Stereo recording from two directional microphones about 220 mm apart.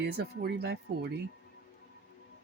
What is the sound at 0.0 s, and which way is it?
Speech, 50° right (ahead or behind).